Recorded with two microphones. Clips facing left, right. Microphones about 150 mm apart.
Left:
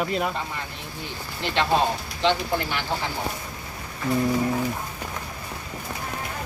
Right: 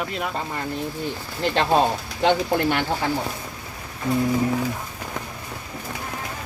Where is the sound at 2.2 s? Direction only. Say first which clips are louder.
Right 4 dB; 50° right (ahead or behind).